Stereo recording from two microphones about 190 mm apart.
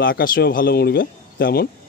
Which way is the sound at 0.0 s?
50° left (ahead or behind).